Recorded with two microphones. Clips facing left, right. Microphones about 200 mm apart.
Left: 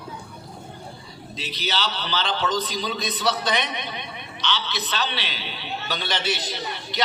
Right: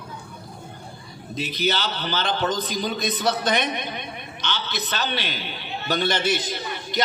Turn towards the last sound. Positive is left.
turn(degrees=-50)  # may be behind; listen again after turning